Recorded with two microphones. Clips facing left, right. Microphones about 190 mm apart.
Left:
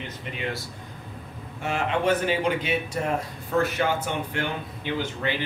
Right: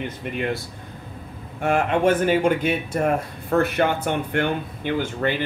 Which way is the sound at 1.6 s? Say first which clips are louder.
Right 6 dB; 50° right (ahead or behind).